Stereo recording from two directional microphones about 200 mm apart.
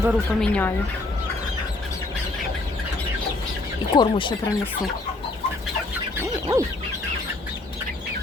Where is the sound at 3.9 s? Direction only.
25° left (ahead or behind).